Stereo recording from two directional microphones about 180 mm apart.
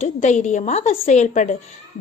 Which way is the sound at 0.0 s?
40° left (ahead or behind).